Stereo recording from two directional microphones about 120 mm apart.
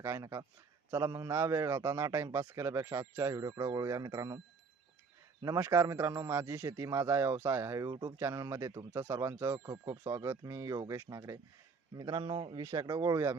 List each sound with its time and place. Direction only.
0.0 s a man's voice: 25° right (ahead or behind)
5.4 s a man's voice: 25° right (ahead or behind)
12.2 s speech: 50° right (ahead or behind)
12.6 s a man's voice: 30° right (ahead or behind)